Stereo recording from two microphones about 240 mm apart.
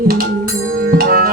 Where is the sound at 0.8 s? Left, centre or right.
Right.